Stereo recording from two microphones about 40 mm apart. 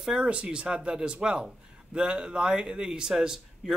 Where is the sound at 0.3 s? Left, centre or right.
Right.